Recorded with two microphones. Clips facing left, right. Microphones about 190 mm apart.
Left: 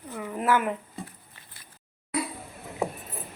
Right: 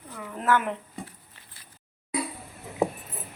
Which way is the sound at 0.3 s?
10° left (ahead or behind).